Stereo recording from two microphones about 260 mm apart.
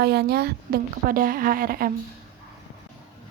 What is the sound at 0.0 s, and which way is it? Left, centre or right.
A woman's voice, right.